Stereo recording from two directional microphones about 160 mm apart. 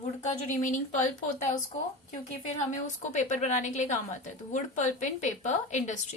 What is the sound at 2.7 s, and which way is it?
A woman's voice, 50° left (ahead or behind).